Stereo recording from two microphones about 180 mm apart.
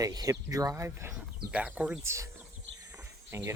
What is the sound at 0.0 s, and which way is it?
Speech, 20° right (ahead or behind).